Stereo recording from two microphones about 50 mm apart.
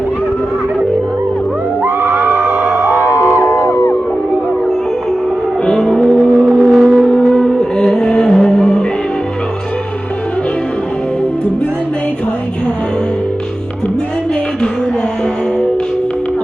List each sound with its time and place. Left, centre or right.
1.8 s a sound: right
2.7 s music: right
3.4 s music: left
5.6 s vehicle: centre
6.5 s music: centre